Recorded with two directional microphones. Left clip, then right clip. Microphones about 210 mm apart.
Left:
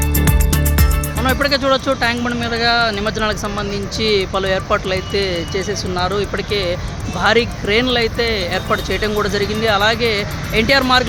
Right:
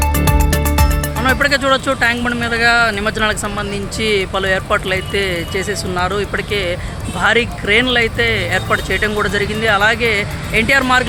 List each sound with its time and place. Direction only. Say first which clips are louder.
0.3 s music: right 4 dB; centre (ahead or behind)
1.2 s speech: right 2 dB; centre (ahead or behind)